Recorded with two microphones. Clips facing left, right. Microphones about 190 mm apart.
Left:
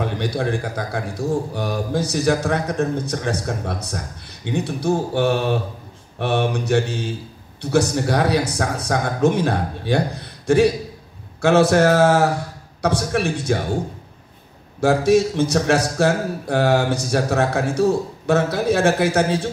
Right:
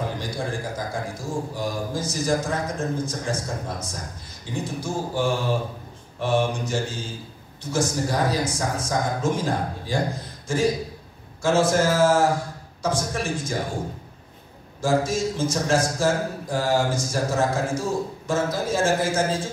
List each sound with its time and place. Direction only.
0.0 s speech: 65° left (ahead or behind)
14.8 s speech: 65° left (ahead or behind)